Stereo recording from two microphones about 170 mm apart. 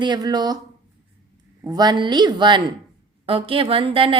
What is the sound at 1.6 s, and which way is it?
A woman's voice, 25° right (ahead or behind).